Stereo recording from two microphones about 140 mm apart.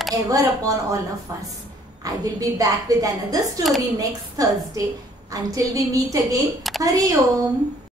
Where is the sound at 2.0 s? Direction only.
25° right (ahead or behind).